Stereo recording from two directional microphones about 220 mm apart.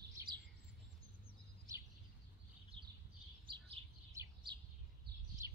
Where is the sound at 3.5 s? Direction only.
15° right (ahead or behind).